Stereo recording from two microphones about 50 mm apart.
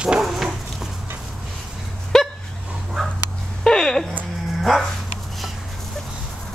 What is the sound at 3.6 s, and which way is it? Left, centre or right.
Music, centre.